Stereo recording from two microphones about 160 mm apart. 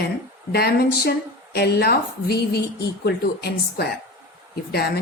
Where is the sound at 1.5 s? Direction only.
90° left.